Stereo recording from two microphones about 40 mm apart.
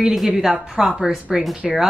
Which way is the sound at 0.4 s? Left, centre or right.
Centre.